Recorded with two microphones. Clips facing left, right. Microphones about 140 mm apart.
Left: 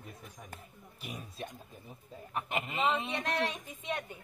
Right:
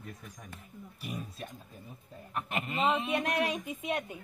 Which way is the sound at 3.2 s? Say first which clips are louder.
Right 3 dB; 15° right (ahead or behind).